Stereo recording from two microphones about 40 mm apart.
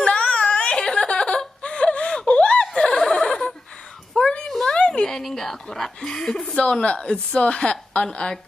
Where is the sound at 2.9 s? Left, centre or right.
Centre.